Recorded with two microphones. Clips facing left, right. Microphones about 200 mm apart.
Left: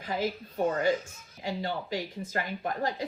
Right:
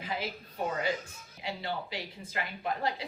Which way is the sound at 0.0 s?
45° left (ahead or behind).